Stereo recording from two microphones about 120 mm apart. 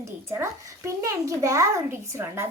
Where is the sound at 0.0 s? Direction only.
25° right (ahead or behind).